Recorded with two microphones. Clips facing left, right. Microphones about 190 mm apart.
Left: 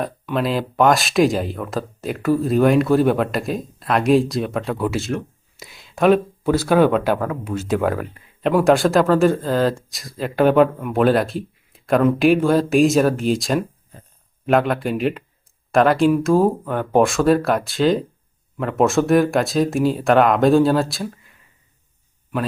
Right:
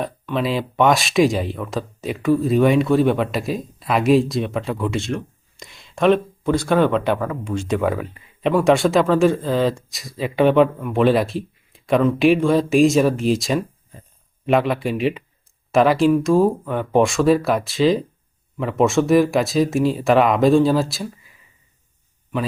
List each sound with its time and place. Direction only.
0.0 s speech: centre (ahead or behind)